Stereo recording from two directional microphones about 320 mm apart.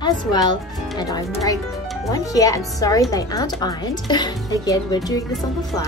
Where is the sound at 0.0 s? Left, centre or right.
Centre.